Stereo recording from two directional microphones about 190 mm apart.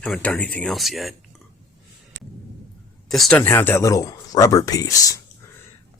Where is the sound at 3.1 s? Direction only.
5° left (ahead or behind).